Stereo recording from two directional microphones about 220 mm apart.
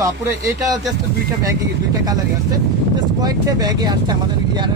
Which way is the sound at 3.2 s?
15° right (ahead or behind).